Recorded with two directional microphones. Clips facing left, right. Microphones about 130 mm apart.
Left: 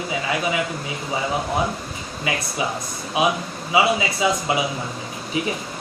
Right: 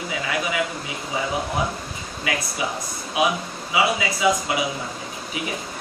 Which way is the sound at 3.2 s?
25° left (ahead or behind).